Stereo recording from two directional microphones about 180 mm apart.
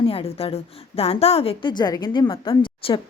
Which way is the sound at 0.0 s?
30° left (ahead or behind).